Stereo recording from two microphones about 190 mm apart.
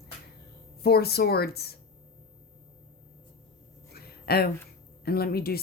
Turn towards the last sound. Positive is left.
turn(degrees=55)  # may be behind; listen again after turning